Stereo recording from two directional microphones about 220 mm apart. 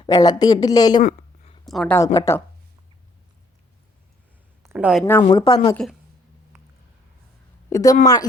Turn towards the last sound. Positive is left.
turn(degrees=15)  # may be behind; listen again after turning